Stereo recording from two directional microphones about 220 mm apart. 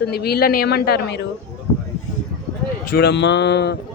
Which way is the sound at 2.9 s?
45° left (ahead or behind).